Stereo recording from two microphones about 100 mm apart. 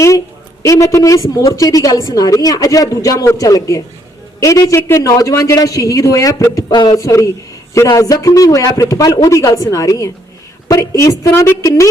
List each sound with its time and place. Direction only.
0.6 s a woman's voice: 30° left (ahead or behind)